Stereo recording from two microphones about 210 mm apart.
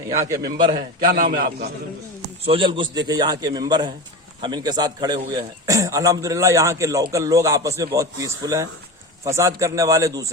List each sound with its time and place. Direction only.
0.2 s a man's voice: 15° right (ahead or behind)
0.7 s a man's voice: 45° right (ahead or behind)
2.4 s a man's voice: 25° right (ahead or behind)